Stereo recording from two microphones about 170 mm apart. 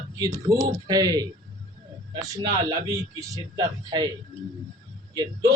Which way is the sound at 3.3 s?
25° right (ahead or behind).